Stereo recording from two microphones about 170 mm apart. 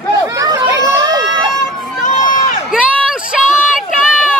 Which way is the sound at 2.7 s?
5° right (ahead or behind).